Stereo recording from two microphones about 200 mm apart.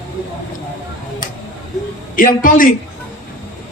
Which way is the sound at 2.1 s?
45° left (ahead or behind).